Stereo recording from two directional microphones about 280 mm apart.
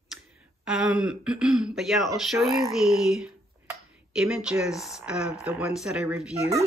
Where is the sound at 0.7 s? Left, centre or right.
Centre.